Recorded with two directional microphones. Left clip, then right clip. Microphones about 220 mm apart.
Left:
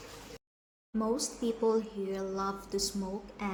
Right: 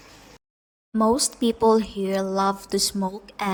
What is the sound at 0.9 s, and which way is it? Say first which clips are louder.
Speech: right 12 dB; 40° right (ahead or behind).